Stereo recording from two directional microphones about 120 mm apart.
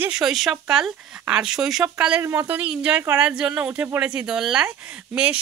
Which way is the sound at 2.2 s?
25° right (ahead or behind).